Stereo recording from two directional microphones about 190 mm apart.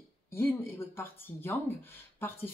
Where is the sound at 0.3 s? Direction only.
15° left (ahead or behind).